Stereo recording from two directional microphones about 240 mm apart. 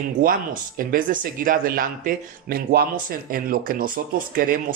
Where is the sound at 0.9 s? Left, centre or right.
Right.